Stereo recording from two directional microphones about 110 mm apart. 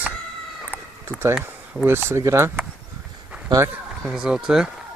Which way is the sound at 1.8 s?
20° right (ahead or behind).